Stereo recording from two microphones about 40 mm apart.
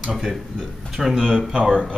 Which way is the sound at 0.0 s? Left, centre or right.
Centre.